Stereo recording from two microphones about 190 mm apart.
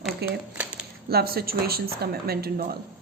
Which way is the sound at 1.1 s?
55° right (ahead or behind).